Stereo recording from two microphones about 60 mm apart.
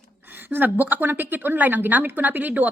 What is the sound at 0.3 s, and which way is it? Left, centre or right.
A woman's voice, right.